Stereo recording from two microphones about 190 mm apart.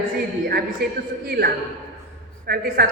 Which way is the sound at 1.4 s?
55° right (ahead or behind).